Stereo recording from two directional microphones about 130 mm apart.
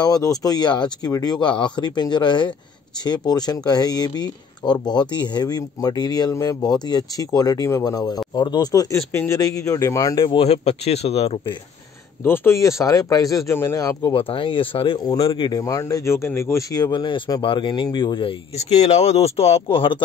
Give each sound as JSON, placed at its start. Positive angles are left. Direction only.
{"t": 0.0, "sound": "speech", "side_deg": 30}
{"t": 10.1, "sound": "speech", "side_deg": 40}
{"t": 10.4, "sound": "speech", "side_deg": 55}
{"t": 12.2, "sound": "speech", "side_deg": 20}
{"t": 14.1, "sound": "speech", "side_deg": 40}
{"t": 15.6, "sound": "speech", "side_deg": 25}
{"t": 18.6, "sound": "speech", "side_deg": 60}